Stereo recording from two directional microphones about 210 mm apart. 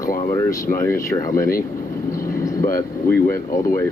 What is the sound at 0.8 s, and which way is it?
Speech, 15° left (ahead or behind).